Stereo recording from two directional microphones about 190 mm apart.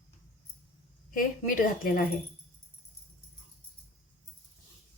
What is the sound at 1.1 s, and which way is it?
Speech, 45° left (ahead or behind).